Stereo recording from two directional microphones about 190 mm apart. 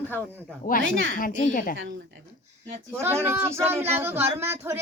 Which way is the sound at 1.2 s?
45° left (ahead or behind).